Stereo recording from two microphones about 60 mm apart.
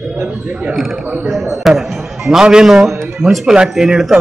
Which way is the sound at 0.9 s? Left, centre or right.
Centre.